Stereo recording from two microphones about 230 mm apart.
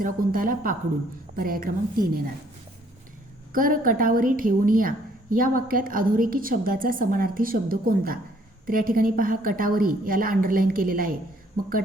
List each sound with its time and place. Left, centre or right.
0.0 s a woman's voice: right
3.5 s a woman's voice: right